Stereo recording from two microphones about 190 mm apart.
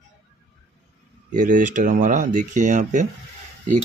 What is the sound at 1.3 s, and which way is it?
Speech, 45° right (ahead or behind).